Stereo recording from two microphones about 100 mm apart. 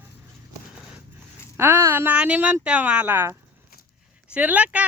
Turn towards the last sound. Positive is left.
turn(degrees=-15)  # may be behind; listen again after turning